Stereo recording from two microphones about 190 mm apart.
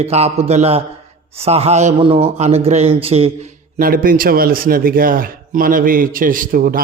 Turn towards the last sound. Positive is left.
turn(degrees=-50)  # may be behind; listen again after turning